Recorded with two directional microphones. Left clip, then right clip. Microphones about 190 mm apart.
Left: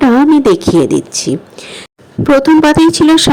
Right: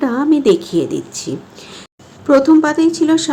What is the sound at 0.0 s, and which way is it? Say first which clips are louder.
A woman's voice: left 6 dB; 35° left (ahead or behind).